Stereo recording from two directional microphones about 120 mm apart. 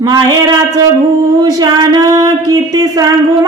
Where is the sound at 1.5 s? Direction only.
30° right (ahead or behind).